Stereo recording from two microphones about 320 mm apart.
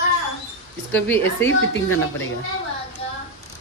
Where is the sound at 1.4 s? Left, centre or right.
Left.